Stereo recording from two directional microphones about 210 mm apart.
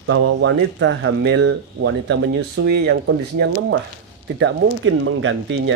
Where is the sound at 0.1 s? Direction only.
65° right (ahead or behind).